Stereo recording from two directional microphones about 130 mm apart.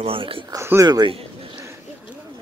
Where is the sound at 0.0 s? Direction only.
45° right (ahead or behind).